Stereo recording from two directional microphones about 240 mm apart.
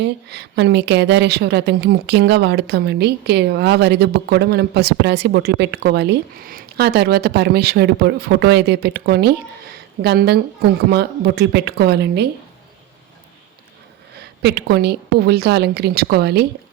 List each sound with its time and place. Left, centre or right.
0.0 s a woman's voice: right
14.4 s a woman's voice: right